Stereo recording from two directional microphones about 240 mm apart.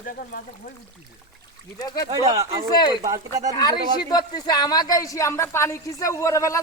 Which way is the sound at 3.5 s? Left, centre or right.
Centre.